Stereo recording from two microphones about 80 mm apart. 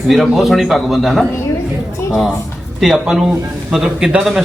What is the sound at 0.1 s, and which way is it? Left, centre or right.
A man's voice, centre.